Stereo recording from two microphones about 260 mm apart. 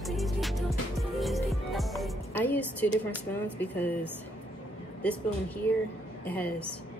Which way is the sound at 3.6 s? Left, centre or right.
Centre.